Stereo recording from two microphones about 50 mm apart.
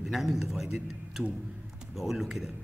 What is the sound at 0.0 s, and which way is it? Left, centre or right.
Speech, centre.